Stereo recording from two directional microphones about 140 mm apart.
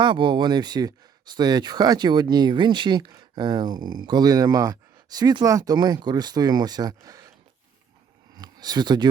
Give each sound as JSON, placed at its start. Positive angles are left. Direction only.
{"t": 0.0, "sound": "speech", "side_deg": -35}
{"t": 8.4, "sound": "speech", "side_deg": -30}